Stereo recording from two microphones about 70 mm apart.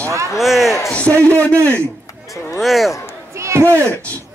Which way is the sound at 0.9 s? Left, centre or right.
Left.